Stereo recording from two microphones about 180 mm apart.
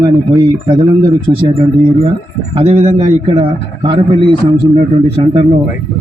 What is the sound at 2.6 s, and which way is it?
A man's voice, 40° right (ahead or behind).